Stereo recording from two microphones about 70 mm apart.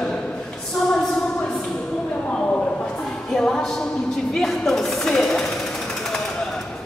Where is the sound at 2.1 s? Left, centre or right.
Centre.